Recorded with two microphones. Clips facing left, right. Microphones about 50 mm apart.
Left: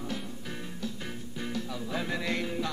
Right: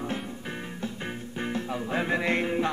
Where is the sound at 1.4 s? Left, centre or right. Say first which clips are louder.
Right 5 dB; right.